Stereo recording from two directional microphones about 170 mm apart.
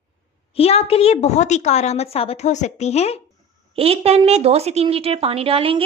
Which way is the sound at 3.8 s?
35° right (ahead or behind).